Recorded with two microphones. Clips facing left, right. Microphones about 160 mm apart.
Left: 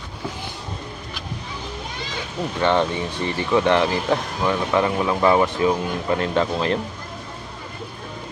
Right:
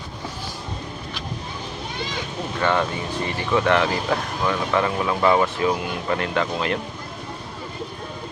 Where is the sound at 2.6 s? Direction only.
25° left (ahead or behind).